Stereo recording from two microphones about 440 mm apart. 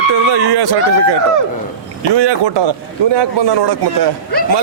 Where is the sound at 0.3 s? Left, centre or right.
Right.